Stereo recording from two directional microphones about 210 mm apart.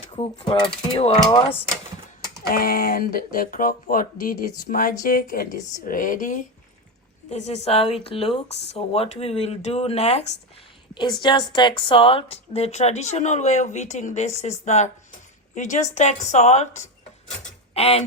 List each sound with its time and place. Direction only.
0.1 s speech: 25° left (ahead or behind)
2.5 s speech: 45° left (ahead or behind); by 18.0 s 30° left (ahead or behind)